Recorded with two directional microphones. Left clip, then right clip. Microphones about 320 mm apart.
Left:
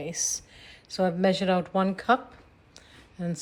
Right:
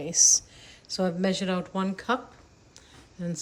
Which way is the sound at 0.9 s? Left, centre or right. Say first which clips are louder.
Left 3 dB; centre.